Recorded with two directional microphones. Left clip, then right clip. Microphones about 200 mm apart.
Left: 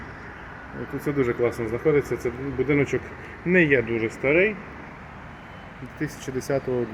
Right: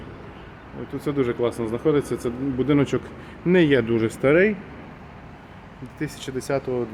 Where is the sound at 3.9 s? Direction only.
30° right (ahead or behind).